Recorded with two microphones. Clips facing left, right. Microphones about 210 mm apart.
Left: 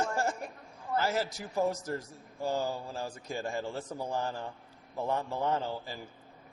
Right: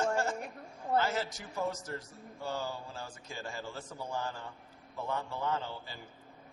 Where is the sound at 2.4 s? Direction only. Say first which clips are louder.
Left 6 dB; 35° left (ahead or behind).